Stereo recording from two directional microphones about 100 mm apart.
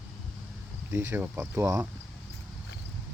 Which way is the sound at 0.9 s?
25° right (ahead or behind).